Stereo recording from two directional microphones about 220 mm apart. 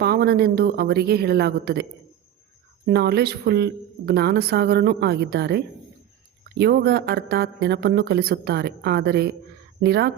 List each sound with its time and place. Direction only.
0.0 s a woman's voice: 45° right (ahead or behind)